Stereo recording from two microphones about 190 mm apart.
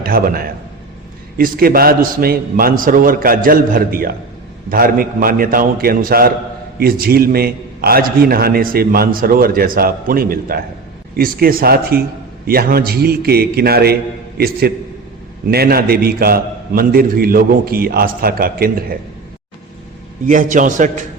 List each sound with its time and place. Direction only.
0.0 s a man's voice: 50° right (ahead or behind)
20.2 s a man's voice: 45° right (ahead or behind)